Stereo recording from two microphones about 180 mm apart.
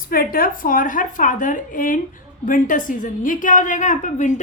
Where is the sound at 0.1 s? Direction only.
55° left (ahead or behind).